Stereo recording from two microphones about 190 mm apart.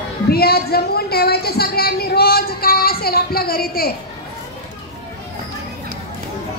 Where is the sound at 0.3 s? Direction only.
55° left (ahead or behind).